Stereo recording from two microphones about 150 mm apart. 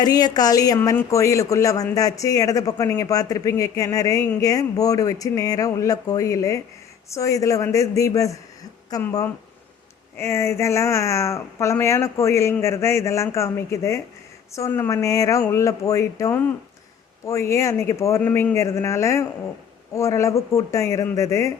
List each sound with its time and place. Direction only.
0.0 s speech: 25° left (ahead or behind)